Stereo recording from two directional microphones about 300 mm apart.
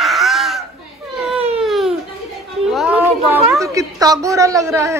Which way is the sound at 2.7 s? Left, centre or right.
Centre.